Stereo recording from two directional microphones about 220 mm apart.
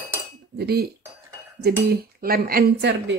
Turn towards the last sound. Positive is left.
turn(degrees=-50)  # may be behind; listen again after turning